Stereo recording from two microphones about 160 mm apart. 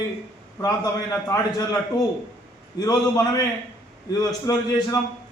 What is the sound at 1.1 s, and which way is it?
A man's voice, 20° left (ahead or behind).